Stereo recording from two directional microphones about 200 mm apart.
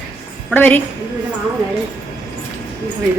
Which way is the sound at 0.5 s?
10° left (ahead or behind).